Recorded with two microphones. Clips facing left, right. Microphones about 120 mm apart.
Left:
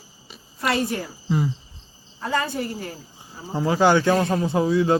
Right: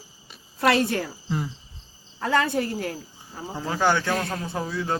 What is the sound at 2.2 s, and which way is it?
Speech, 65° right (ahead or behind).